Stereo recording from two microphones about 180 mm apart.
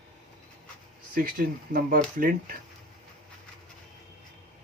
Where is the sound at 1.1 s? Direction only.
50° right (ahead or behind).